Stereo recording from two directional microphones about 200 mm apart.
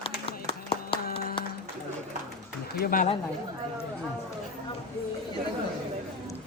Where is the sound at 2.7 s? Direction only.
45° left (ahead or behind).